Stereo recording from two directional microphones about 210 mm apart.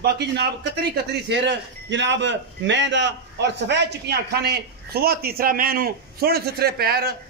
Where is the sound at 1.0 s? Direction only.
50° right (ahead or behind).